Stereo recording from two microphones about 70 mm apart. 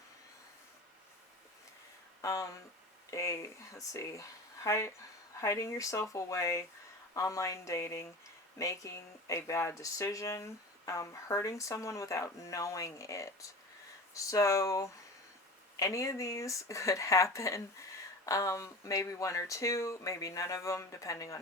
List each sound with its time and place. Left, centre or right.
2.2 s speech: left